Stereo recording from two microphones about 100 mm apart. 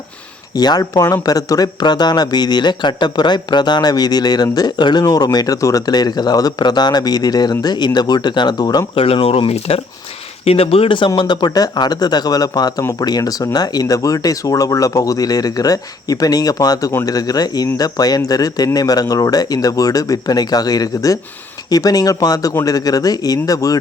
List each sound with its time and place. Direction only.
0.5 s speech: 40° left (ahead or behind)
9.0 s speech: 70° left (ahead or behind)
11.2 s speech: 50° left (ahead or behind)